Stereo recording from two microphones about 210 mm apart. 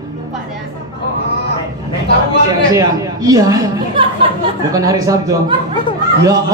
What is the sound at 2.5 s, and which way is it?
A man's voice, 15° right (ahead or behind).